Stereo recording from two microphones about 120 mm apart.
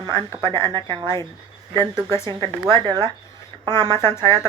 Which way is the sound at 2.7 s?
40° right (ahead or behind).